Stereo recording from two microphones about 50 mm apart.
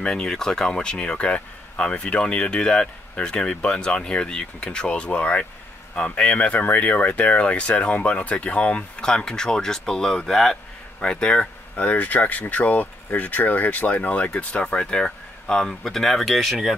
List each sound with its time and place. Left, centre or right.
0.0 s speech: centre
11.8 s speech: left; by 16.5 s centre